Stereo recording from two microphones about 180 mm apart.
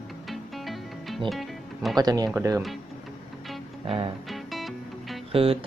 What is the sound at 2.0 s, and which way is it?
Speech, 20° right (ahead or behind).